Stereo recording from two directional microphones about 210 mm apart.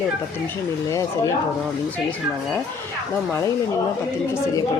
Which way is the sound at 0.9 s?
15° left (ahead or behind).